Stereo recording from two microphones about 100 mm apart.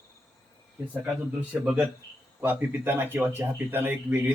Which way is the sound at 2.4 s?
20° right (ahead or behind).